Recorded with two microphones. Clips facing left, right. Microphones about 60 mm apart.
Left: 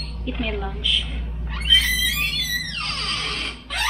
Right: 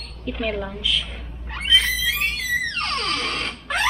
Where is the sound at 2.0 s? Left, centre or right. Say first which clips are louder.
Right 1 dB; right.